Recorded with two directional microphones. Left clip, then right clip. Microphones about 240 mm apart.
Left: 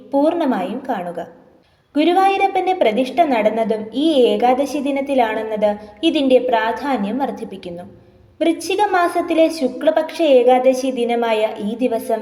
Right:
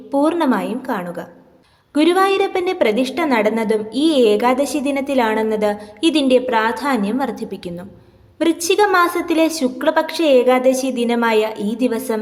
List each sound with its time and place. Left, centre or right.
0.1 s a woman's voice: right